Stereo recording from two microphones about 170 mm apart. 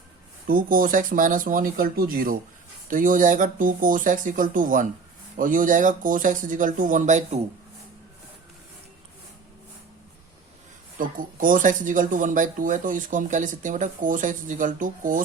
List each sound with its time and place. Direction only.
0.4 s speech: 55° right (ahead or behind)
10.9 s speech: 55° right (ahead or behind)